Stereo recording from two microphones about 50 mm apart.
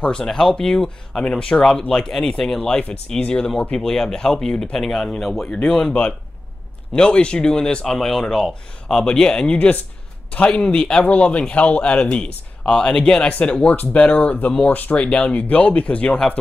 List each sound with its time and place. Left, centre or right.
0.0 s speech: centre
3.2 s speech: left
3.7 s speech: centre
11.1 s speech: left
13.3 s speech: left
15.0 s speech: left